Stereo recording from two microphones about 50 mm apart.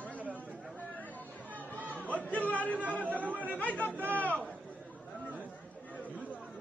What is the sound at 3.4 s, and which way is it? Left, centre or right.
Chatter, left.